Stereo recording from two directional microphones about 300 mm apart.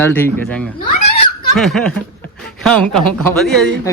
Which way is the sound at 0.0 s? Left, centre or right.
Centre.